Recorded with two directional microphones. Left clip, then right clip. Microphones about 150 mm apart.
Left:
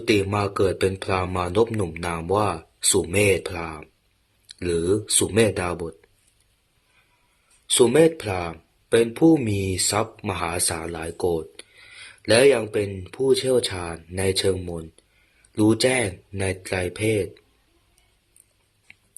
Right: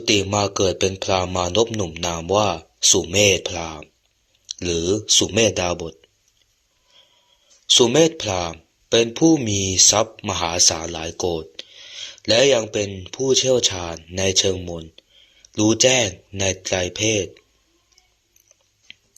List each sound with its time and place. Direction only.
0.3 s speech: 15° right (ahead or behind)
1.6 s speech: 5° right (ahead or behind)
1.9 s speech: 15° right (ahead or behind)
5.3 s speech: 20° right (ahead or behind)
7.9 s speech: 25° right (ahead or behind)